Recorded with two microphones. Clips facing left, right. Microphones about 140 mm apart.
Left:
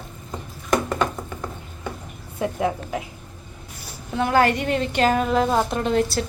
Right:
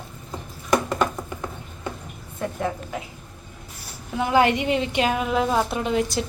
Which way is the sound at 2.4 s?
10° left (ahead or behind).